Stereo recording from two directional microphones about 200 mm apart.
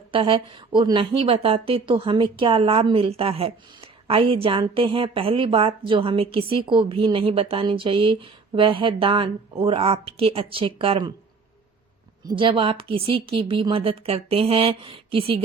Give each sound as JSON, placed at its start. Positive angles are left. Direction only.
{"t": 0.1, "sound": "a woman's voice", "side_deg": -25}
{"t": 12.4, "sound": "a woman's voice", "side_deg": -25}